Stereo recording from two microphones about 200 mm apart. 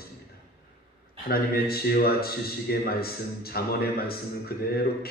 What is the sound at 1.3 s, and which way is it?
A man's voice, 50° left (ahead or behind).